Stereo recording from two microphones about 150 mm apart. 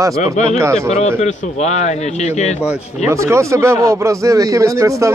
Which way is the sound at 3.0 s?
20° right (ahead or behind).